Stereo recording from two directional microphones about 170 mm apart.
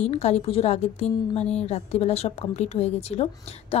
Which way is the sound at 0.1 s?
40° left (ahead or behind).